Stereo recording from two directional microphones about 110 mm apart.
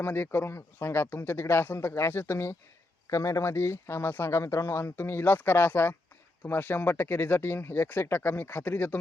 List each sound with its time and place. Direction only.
0.0 s speech: 20° left (ahead or behind)